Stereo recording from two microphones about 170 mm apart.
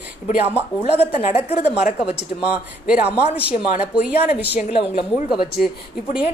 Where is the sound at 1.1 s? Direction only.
40° left (ahead or behind).